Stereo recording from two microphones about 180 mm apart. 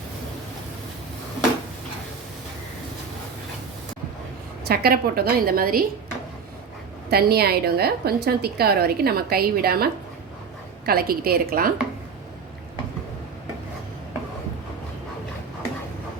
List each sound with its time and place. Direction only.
4.6 s a woman's voice: 60° right (ahead or behind)
7.1 s a woman's voice: 60° right (ahead or behind)